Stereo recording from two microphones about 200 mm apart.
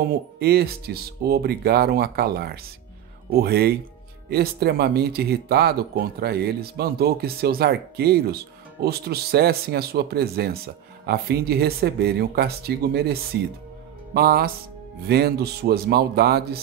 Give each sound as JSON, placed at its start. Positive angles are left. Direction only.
{"t": 0.0, "sound": "speech", "side_deg": -50}